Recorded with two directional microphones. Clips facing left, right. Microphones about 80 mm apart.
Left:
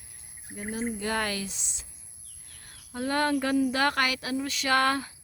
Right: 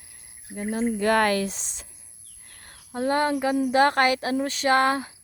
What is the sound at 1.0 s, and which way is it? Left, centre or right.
Speech, right.